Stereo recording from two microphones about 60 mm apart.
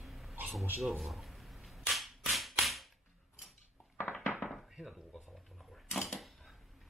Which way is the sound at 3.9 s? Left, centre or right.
Left.